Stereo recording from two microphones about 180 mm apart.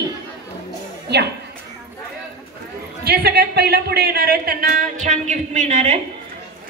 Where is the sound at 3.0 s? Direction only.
60° right (ahead or behind); by 6.0 s 40° right (ahead or behind).